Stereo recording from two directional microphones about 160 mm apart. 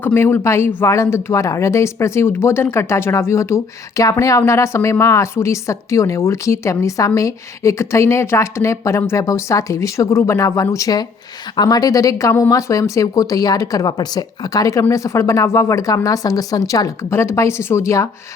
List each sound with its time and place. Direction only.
0.0 s speech: 15° left (ahead or behind)